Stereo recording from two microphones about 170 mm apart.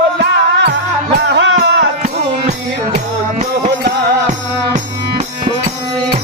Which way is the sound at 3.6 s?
65° right (ahead or behind).